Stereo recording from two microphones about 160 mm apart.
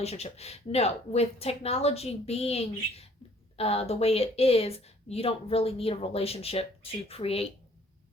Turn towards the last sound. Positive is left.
turn(degrees=35)  # may be behind; listen again after turning